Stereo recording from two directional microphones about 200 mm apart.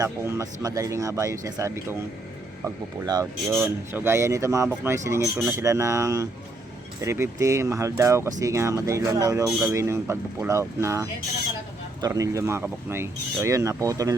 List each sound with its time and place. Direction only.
0.0 s speech: 15° right (ahead or behind)